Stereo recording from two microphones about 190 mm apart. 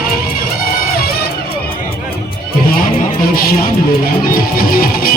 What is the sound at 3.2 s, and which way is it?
Music, 50° left (ahead or behind).